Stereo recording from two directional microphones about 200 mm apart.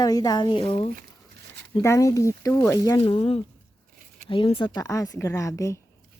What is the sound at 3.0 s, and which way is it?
A woman's voice, 25° left (ahead or behind).